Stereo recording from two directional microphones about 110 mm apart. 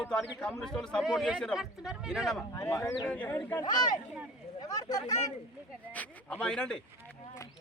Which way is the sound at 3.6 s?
40° left (ahead or behind).